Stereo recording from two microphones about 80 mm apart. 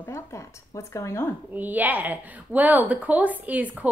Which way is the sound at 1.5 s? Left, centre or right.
Right.